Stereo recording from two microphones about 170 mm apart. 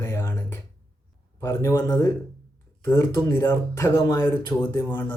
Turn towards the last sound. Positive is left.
turn(degrees=10)  # may be behind; listen again after turning